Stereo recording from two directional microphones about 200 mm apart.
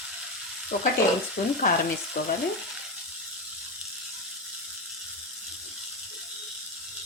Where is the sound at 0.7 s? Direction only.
40° left (ahead or behind).